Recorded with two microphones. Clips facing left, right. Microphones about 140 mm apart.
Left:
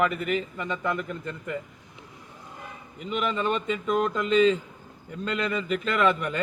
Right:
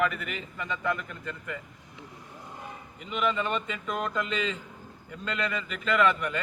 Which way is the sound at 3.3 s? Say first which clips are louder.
Left 3 dB; 35° left (ahead or behind).